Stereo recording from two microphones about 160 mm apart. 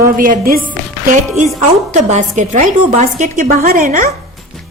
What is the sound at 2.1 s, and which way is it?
A woman's voice, 50° right (ahead or behind).